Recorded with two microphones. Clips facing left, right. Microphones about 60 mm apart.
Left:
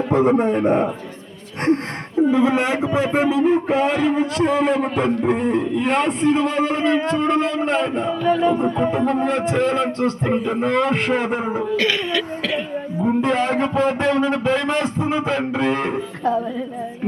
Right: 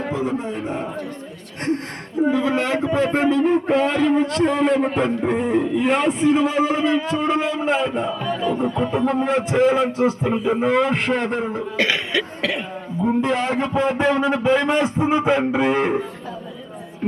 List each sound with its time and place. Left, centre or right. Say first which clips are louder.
0.1 s a man's voice: left 11 dB; left
2.3 s a man's voice: left 3 dB; left; by 8.1 s centre
8.3 s speech: left 8 dB; left
9.0 s a man's voice: even; centre
11.8 s a man's voice: left 1 dB; centre
13.1 s a man's voice: left 1 dB; centre